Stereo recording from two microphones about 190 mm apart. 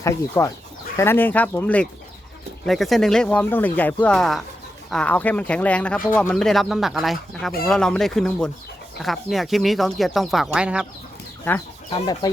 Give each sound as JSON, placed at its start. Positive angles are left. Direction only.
{"t": 0.0, "sound": "speech", "side_deg": 15}
{"t": 11.9, "sound": "speech", "side_deg": 20}